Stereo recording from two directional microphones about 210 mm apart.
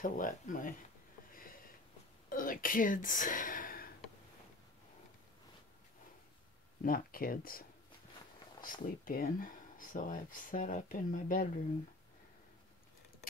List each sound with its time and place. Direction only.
0.0 s speech: 40° left (ahead or behind)
1.3 s sniff: 45° left (ahead or behind)
2.2 s whispering: 40° left (ahead or behind)
6.8 s speech: 45° left (ahead or behind)
8.8 s speech: 40° left (ahead or behind)